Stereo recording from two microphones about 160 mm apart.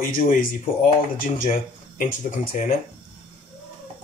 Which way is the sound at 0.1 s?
65° left (ahead or behind).